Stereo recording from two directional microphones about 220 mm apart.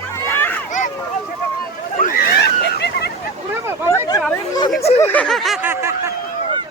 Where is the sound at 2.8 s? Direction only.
45° left (ahead or behind).